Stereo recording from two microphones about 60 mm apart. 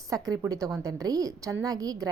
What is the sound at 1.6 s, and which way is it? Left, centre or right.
Speech, right.